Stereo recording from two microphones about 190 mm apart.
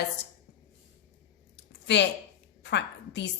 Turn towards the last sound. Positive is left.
turn(degrees=65)  # may be behind; listen again after turning